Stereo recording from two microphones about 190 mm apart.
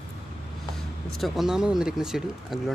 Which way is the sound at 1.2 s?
Centre (ahead or behind).